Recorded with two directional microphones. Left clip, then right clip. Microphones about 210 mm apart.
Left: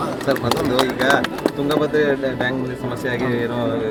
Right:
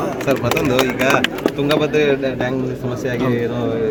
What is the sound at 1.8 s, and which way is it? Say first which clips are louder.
Speech: right 2 dB; 35° right (ahead or behind).